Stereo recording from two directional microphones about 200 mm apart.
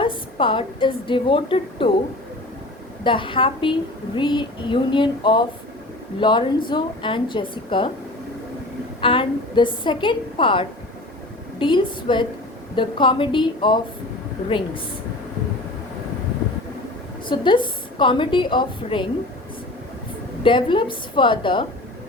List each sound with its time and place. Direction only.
0.0 s a woman's voice: 25° left (ahead or behind)
3.0 s a woman's voice: 25° left (ahead or behind)
9.0 s a woman's voice: 25° left (ahead or behind)
17.2 s a woman's voice: 25° left (ahead or behind)
20.4 s a woman's voice: 25° left (ahead or behind)